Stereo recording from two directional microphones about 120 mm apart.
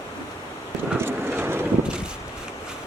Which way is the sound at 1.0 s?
20° right (ahead or behind).